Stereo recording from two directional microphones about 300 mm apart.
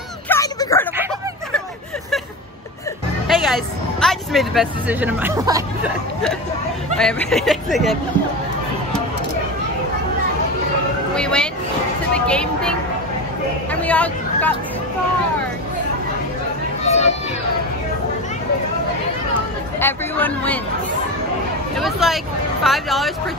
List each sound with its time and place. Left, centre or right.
0.3 s a sound: centre
3.3 s speech: centre
7.0 s speech: centre
11.1 s a sound: centre
12.1 s speech: centre
13.7 s hubbub: centre
16.8 s a sound: left
19.8 s speech: centre
21.7 s speech: centre